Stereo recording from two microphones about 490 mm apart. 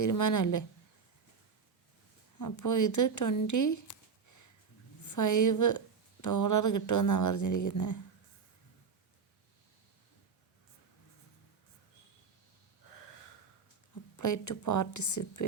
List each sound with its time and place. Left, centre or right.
0.0 s speech: left
2.4 s speech: left
14.2 s speech: left